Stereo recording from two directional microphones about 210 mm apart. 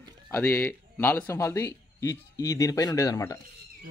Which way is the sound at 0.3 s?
10° left (ahead or behind).